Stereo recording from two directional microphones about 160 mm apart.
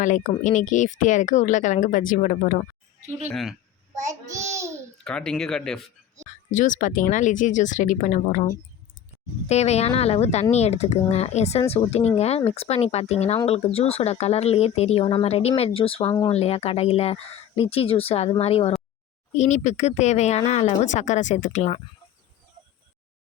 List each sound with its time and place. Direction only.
0.0 s speech: 50° left (ahead or behind)
3.2 s speech: centre (ahead or behind)
4.5 s babbling: 20° right (ahead or behind)
5.0 s speech: 5° left (ahead or behind)
6.5 s speech: 50° left (ahead or behind)